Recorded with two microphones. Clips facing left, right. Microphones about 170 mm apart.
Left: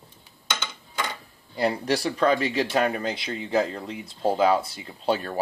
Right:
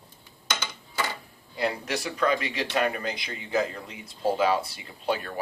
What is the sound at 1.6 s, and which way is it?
Speech, 35° left (ahead or behind).